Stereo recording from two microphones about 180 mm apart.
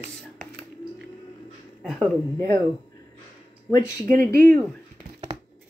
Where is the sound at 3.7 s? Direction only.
15° left (ahead or behind).